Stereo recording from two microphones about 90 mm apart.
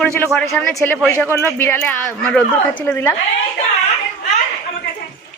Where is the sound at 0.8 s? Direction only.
25° left (ahead or behind).